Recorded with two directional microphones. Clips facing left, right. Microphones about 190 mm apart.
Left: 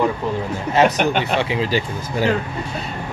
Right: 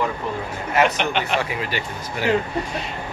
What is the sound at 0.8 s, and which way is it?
Speech, 45° left (ahead or behind).